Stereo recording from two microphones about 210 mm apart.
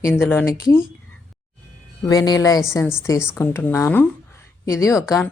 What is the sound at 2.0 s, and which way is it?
Speech, 20° left (ahead or behind).